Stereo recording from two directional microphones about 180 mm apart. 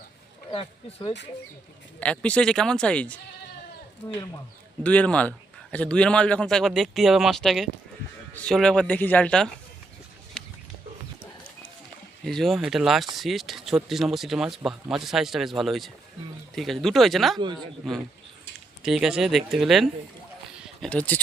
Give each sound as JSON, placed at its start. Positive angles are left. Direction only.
{"t": 0.5, "sound": "speech", "side_deg": 30}
{"t": 2.0, "sound": "speech", "side_deg": 5}
{"t": 12.2, "sound": "speech", "side_deg": 0}
{"t": 18.8, "sound": "speech", "side_deg": -5}